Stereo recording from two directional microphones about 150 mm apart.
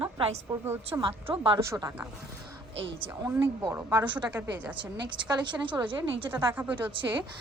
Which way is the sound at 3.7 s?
15° right (ahead or behind).